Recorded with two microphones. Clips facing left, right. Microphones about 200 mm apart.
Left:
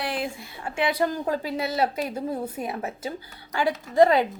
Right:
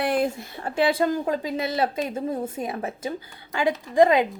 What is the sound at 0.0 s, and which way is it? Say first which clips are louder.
A woman's voice: right 6 dB; 50° right (ahead or behind).